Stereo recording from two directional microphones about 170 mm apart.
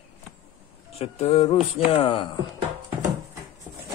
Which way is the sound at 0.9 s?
35° left (ahead or behind).